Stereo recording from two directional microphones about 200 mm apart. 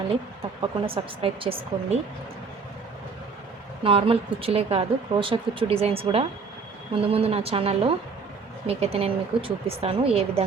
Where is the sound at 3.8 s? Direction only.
25° right (ahead or behind).